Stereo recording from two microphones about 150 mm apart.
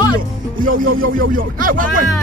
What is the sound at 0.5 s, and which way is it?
Speech, 70° right (ahead or behind).